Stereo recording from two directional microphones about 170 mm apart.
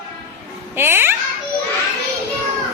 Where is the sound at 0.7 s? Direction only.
15° right (ahead or behind).